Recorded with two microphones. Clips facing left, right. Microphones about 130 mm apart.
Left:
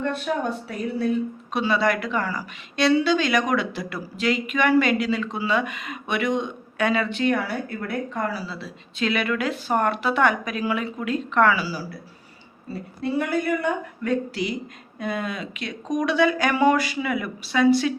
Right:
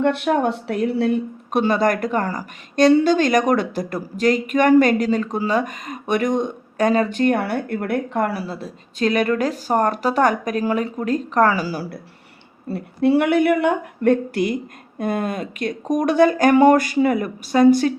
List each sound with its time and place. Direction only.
0.0 s speech: 75° right (ahead or behind); by 11.9 s 50° right (ahead or behind)
12.6 s speech: 65° right (ahead or behind); by 17.9 s 45° right (ahead or behind)